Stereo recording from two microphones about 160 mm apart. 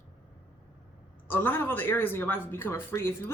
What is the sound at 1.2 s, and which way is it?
Speech, 10° left (ahead or behind).